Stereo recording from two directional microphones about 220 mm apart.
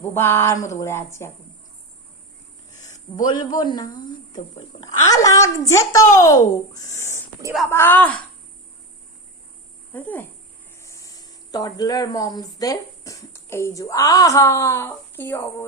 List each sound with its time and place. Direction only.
0.0 s a child's voice: 10° left (ahead or behind)
3.2 s speech: 20° left (ahead or behind)
5.0 s a child's voice: 15° left (ahead or behind)
9.9 s a child's voice: 10° left (ahead or behind)